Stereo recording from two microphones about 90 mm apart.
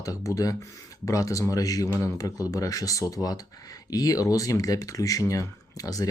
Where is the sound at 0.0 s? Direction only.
40° left (ahead or behind).